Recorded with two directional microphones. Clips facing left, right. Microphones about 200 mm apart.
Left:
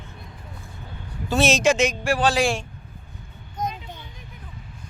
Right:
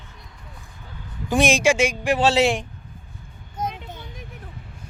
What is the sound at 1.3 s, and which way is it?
Speech, 15° right (ahead or behind).